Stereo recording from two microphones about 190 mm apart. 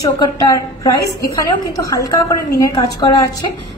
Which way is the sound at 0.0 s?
20° left (ahead or behind).